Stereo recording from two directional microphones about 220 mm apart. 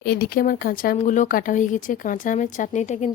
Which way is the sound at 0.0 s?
45° left (ahead or behind).